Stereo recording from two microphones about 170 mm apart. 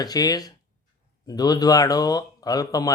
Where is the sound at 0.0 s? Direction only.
20° left (ahead or behind).